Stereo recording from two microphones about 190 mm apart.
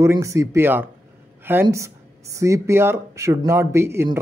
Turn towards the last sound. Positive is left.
turn(degrees=-15)  # may be behind; listen again after turning